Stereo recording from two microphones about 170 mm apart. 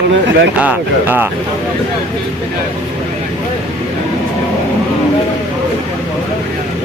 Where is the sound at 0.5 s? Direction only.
10° right (ahead or behind).